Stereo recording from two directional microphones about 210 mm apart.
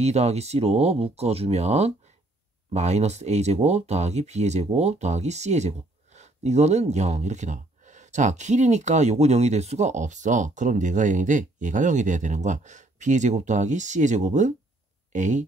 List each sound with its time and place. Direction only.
0.0 s speech: 30° right (ahead or behind)